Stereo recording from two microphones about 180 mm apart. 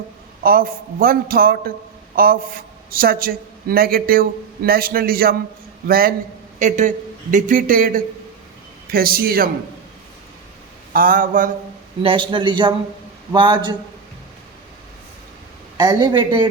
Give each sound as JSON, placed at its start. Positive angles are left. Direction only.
{"t": 0.4, "sound": "a man's voice", "side_deg": -55}
{"t": 6.6, "sound": "a man's voice", "side_deg": -45}
{"t": 10.9, "sound": "a man's voice", "side_deg": -50}
{"t": 12.0, "sound": "a man's voice", "side_deg": -25}
{"t": 15.8, "sound": "a man's voice", "side_deg": -25}